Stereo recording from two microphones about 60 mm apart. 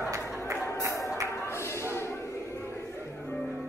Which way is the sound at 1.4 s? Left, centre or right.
Left.